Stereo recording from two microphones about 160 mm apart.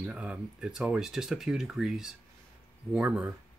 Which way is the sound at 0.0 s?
10° right (ahead or behind).